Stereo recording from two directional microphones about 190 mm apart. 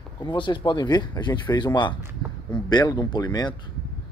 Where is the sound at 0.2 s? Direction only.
25° left (ahead or behind).